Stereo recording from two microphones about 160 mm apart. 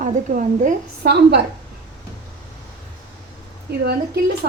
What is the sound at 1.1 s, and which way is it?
Speech, 90° right.